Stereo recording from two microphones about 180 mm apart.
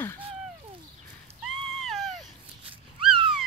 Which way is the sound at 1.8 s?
Centre (ahead or behind).